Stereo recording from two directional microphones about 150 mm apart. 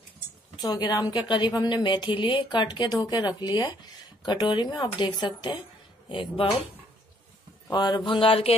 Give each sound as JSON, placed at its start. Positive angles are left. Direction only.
{"t": 0.6, "sound": "a woman's voice", "side_deg": 25}
{"t": 6.0, "sound": "mantra", "side_deg": 35}
{"t": 7.7, "sound": "mantra", "side_deg": 30}